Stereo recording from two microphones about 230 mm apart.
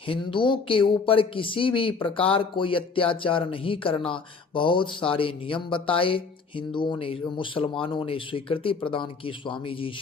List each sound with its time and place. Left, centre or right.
0.1 s speech: left